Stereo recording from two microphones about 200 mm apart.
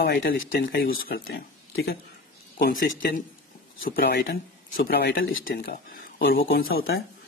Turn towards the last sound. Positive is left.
turn(degrees=50)  # may be behind; listen again after turning